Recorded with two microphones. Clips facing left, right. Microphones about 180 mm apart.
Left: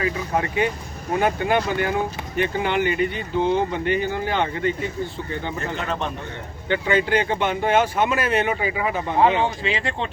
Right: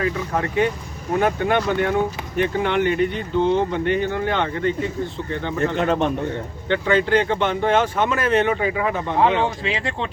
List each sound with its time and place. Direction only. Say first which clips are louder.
0.0 s speech: right 1 dB; 5° left (ahead or behind)
5.7 s a man's voice: right 8 dB; 35° right (ahead or behind)
6.7 s speech: right 2 dB; 10° left (ahead or behind)